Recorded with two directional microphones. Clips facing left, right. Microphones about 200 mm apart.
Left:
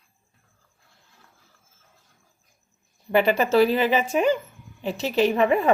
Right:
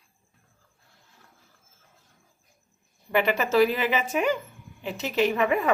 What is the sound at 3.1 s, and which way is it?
A woman's voice, 35° left (ahead or behind).